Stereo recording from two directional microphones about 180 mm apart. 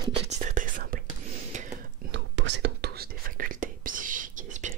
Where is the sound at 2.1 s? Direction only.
80° right.